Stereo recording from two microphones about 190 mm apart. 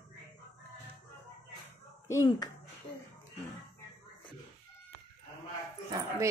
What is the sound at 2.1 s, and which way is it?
Speech, 20° left (ahead or behind).